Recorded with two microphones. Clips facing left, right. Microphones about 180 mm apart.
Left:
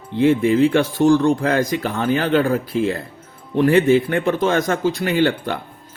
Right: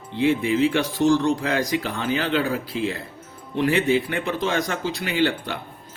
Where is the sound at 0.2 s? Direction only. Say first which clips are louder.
Left 5 dB; 50° left (ahead or behind).